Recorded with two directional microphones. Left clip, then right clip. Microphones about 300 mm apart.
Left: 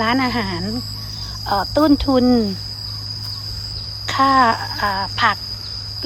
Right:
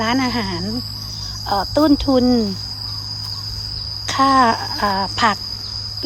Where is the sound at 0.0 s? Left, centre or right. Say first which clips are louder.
Left 1 dB; centre.